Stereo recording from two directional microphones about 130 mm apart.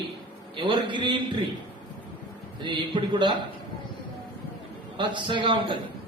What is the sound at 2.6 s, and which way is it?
Speech, 35° right (ahead or behind).